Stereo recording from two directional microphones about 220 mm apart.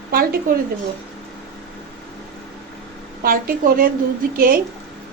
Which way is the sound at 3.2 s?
40° right (ahead or behind).